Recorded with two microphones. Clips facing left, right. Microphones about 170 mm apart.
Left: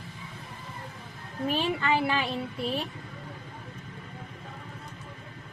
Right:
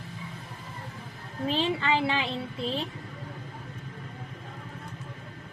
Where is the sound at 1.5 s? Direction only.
25° right (ahead or behind).